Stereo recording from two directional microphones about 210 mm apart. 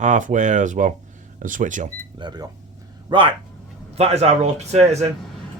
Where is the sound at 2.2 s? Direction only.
20° right (ahead or behind).